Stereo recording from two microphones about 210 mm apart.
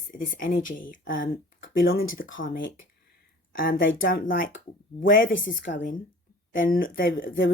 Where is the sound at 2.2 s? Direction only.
65° left (ahead or behind).